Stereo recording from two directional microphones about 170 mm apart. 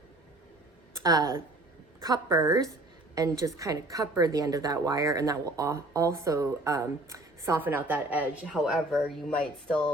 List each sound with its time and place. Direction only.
1.0 s a woman's voice: 20° right (ahead or behind); by 9.8 s 5° left (ahead or behind)